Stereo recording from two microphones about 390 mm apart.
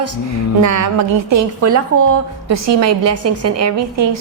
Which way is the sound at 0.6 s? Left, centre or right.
Right.